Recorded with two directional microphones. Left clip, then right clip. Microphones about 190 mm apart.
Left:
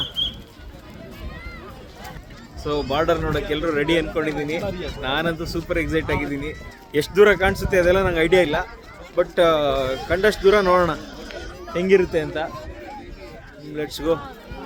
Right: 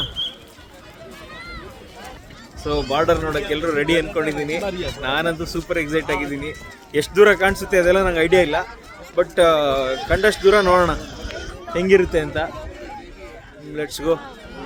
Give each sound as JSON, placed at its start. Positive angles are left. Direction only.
{"t": 2.9, "sound": "a man's voice", "side_deg": 0}
{"t": 4.6, "sound": "speech", "side_deg": -60}
{"t": 4.9, "sound": "a man's voice", "side_deg": 0}
{"t": 13.7, "sound": "a man's voice", "side_deg": 0}